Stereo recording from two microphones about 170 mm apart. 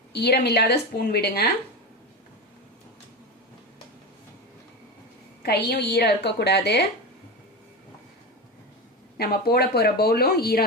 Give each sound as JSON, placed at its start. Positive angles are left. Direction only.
{"t": 0.1, "sound": "a woman's voice", "side_deg": 75}
{"t": 5.4, "sound": "a woman's voice", "side_deg": 70}
{"t": 9.1, "sound": "speech", "side_deg": 65}